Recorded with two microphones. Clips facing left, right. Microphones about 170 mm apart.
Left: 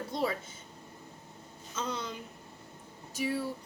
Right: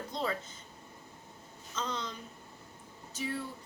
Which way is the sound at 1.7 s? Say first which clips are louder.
Left 1 dB; 10° left (ahead or behind).